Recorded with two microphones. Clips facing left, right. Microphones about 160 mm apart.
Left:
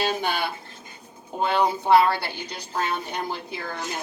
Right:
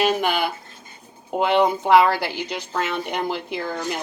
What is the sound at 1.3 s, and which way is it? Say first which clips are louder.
A woman's voice: right 4 dB; 90° right.